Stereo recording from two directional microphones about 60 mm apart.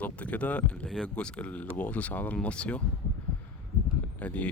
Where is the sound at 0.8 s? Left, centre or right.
Centre.